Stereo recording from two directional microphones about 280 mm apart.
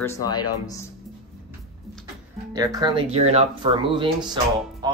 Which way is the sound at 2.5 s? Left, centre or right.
Centre.